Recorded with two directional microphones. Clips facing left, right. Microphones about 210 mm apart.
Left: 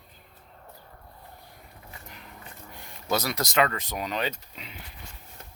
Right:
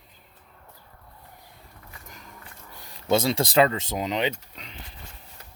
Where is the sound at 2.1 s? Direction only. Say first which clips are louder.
Right 1 dB; 45° right (ahead or behind).